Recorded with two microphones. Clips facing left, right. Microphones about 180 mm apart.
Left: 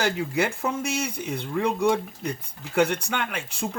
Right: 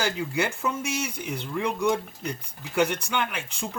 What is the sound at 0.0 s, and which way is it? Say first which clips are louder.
Speech: left 2 dB; 60° left (ahead or behind).